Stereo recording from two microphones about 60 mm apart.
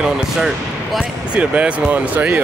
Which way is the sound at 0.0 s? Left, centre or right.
Centre.